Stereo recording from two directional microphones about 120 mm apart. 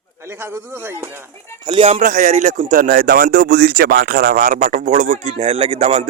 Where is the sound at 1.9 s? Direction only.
90° right.